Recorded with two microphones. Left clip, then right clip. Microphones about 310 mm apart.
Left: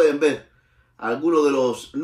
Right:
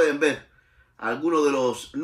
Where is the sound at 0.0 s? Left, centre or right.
Centre.